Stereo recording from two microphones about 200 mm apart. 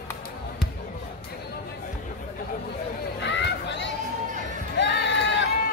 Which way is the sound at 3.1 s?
60° left (ahead or behind).